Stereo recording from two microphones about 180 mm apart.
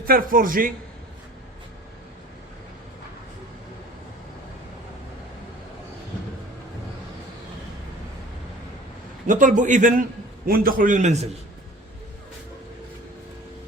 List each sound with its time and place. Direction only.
0.0 s a man's voice: 55° right (ahead or behind)
9.2 s a man's voice: 45° right (ahead or behind)